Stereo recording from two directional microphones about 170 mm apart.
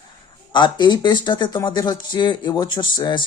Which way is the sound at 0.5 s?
25° left (ahead or behind).